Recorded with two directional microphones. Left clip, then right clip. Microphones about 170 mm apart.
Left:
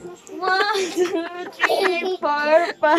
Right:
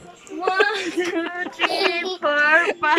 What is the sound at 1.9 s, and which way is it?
Speech, 20° left (ahead or behind).